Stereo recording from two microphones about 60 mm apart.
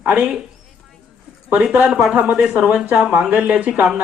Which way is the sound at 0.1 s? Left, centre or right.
Centre.